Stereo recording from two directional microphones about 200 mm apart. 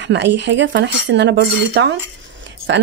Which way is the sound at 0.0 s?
60° right (ahead or behind).